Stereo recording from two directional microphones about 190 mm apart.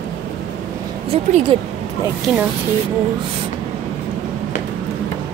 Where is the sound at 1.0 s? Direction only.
30° right (ahead or behind).